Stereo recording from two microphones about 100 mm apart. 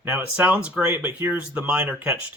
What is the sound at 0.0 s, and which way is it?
Speech, 20° right (ahead or behind).